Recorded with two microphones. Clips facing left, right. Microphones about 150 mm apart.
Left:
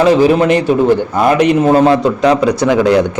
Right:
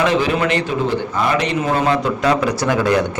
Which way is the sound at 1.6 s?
40° left (ahead or behind).